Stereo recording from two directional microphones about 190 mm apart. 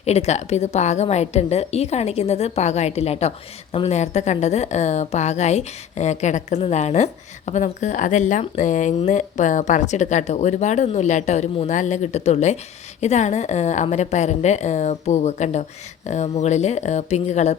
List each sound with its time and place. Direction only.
0.0 s a woman's voice: 35° left (ahead or behind)